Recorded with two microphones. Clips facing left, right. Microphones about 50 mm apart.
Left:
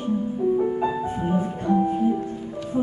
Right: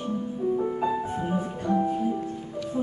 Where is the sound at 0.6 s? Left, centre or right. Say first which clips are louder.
Left 3 dB; centre.